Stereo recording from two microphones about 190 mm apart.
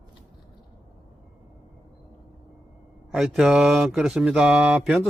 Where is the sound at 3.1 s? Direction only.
Centre (ahead or behind).